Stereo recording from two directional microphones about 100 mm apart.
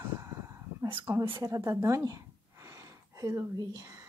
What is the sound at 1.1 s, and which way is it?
Speech, 20° right (ahead or behind).